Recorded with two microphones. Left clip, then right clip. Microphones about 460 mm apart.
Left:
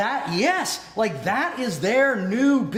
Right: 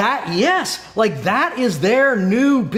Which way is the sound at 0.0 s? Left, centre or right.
Right.